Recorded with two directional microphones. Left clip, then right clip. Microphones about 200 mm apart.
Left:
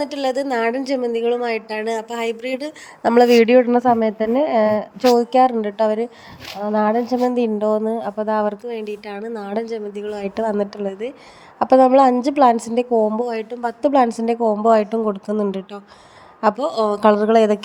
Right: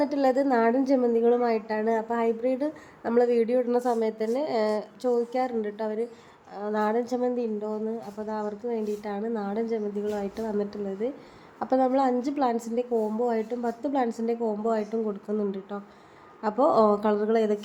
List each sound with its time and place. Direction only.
0.0 s a woman's voice: 30° left (ahead or behind)
5.0 s a woman's voice: 35° left (ahead or behind)